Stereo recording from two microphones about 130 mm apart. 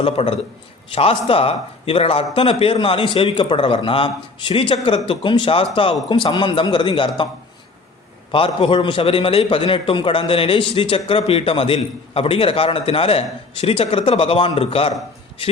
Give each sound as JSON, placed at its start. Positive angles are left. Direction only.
{"t": 0.0, "sound": "a man's voice", "side_deg": 50}
{"t": 8.3, "sound": "a man's voice", "side_deg": 40}